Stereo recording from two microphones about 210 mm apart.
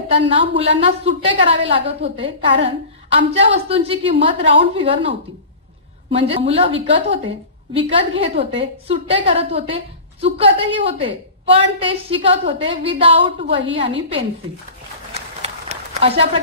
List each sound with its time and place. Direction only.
0.1 s a woman's voice: 25° right (ahead or behind)
6.1 s a woman's voice: 25° right (ahead or behind)
15.1 s a sound: 30° right (ahead or behind)